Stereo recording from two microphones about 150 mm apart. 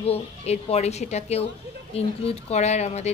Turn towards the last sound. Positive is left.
turn(degrees=45)  # may be behind; listen again after turning